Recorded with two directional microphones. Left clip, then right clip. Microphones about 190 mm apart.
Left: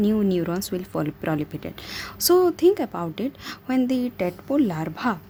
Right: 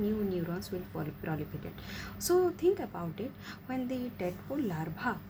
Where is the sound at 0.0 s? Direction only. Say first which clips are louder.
Left 11 dB; 65° left (ahead or behind); by 5.1 s 50° left (ahead or behind).